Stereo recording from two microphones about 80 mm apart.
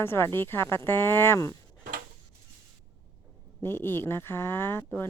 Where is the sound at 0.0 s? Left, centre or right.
Left.